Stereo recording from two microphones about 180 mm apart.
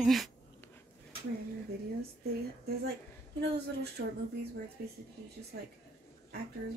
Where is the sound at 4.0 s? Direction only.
60° right (ahead or behind).